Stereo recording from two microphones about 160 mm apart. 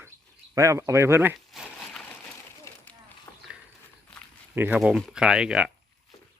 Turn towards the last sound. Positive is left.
turn(degrees=-5)  # may be behind; listen again after turning